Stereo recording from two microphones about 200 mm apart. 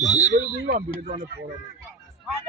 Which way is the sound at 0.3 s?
40° right (ahead or behind).